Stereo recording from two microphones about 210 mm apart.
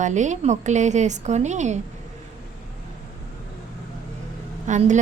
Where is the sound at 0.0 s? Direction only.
35° right (ahead or behind).